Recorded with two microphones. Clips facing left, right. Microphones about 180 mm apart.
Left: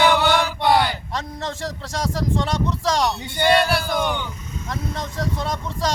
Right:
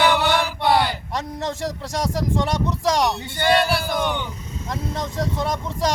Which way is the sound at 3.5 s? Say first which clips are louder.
Even; centre (ahead or behind).